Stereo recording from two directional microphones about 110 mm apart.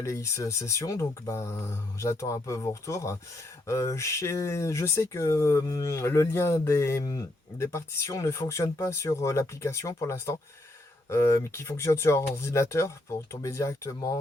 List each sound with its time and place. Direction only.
0.0 s speech: 25° left (ahead or behind)